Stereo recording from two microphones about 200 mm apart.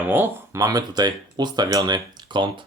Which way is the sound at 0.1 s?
10° right (ahead or behind).